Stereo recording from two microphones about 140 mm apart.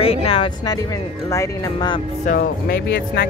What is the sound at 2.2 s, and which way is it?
Speech, 90° left.